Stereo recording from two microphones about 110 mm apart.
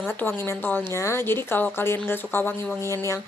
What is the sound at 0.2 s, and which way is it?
A woman's voice, 20° left (ahead or behind).